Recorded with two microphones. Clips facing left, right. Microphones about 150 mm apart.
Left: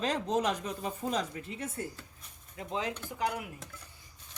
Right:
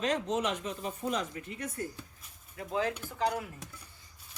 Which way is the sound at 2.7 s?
20° left (ahead or behind).